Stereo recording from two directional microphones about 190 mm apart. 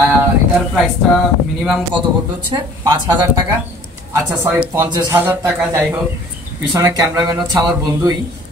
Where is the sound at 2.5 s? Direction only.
20° right (ahead or behind).